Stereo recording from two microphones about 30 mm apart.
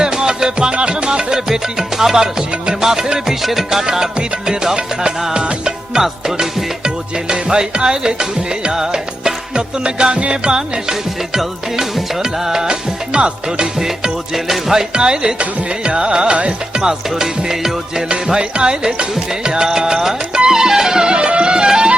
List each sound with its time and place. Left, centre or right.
0.0 s music: right
2.0 s music: centre
6.0 s music: centre
6.8 s music: right
11.3 s music: centre
13.1 s music: right
14.3 s music: centre
14.9 s music: right
16.8 s music: centre
18.3 s music: right
21.1 s music: right